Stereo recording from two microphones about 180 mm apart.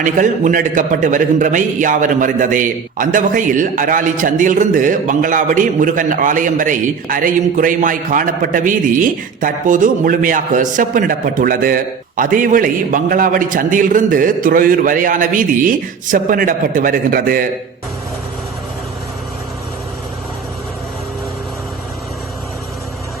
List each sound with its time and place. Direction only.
0.0 s a man's voice: 45° right (ahead or behind)